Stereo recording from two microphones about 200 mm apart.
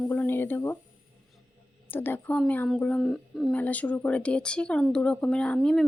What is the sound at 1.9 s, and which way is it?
A woman's voice, 10° left (ahead or behind).